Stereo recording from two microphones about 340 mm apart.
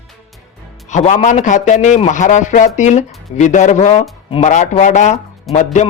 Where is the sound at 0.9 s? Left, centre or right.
Left.